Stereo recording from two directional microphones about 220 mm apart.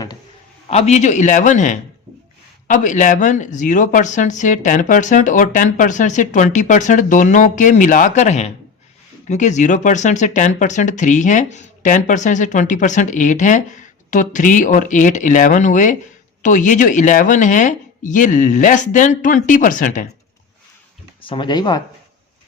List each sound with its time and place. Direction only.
0.7 s speech: 30° left (ahead or behind)
21.2 s speech: 20° left (ahead or behind)